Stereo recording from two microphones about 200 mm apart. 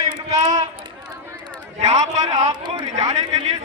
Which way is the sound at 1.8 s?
35° right (ahead or behind).